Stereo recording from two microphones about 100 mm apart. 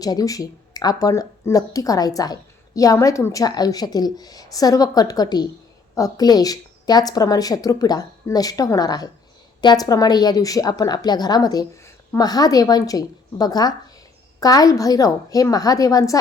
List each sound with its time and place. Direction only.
0.0 s a woman's voice: 40° left (ahead or behind)